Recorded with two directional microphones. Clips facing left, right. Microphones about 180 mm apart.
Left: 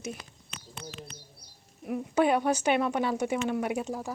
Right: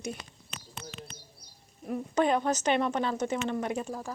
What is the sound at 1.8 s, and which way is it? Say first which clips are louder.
A woman's voice: left 2 dB; 10° left (ahead or behind).